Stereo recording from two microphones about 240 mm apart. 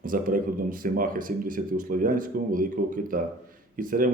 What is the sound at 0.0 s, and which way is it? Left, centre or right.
Speech, right.